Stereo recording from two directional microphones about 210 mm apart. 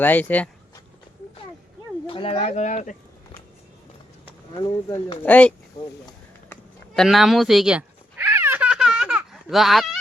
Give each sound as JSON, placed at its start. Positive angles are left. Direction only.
{"t": 0.0, "sound": "speech", "side_deg": 10}
{"t": 2.0, "sound": "speech", "side_deg": 25}
{"t": 4.6, "sound": "speech", "side_deg": 20}
{"t": 5.2, "sound": "speech", "side_deg": 5}
{"t": 6.5, "sound": "a sound", "side_deg": 0}